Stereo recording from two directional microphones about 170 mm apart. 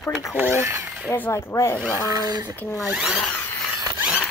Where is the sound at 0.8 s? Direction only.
5° right (ahead or behind).